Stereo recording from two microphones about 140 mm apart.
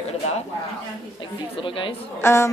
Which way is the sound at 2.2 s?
20° left (ahead or behind).